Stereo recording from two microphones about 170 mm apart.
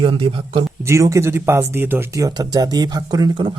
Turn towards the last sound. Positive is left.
turn(degrees=-30)  # may be behind; listen again after turning